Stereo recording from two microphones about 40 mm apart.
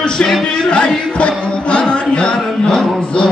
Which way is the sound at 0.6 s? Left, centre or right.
Left.